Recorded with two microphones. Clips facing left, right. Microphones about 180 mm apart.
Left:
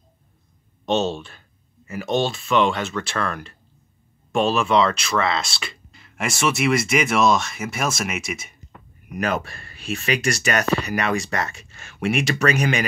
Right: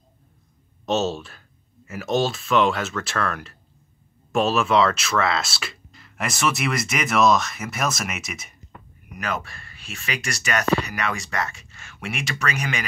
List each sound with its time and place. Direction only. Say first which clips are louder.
0.8 s speech: left 1 dB; 5° right (ahead or behind)
9.2 s speech: left 5 dB; 40° left (ahead or behind)
11.0 s speech: left 4 dB; 35° left (ahead or behind)